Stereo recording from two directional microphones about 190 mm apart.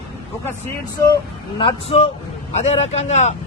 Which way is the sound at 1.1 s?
25° left (ahead or behind).